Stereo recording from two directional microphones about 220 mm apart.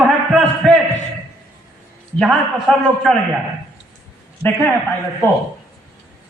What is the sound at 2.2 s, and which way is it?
Speech, centre (ahead or behind).